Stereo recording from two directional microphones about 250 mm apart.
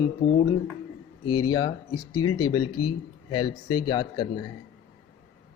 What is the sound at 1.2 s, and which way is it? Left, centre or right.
Speech, left.